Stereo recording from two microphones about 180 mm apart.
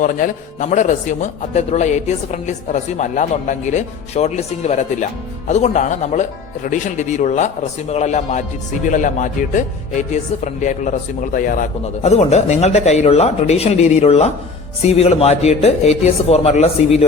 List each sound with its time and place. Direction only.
0.0 s speech: 45° left (ahead or behind)